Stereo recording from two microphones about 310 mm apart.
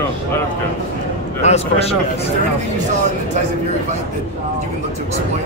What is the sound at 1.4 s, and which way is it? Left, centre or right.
Speech, left.